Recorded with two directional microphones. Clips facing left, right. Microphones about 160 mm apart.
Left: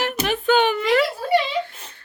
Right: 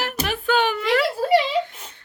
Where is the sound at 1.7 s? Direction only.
15° right (ahead or behind).